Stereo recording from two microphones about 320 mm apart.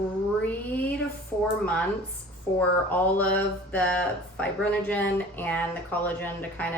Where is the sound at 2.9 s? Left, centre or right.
Centre.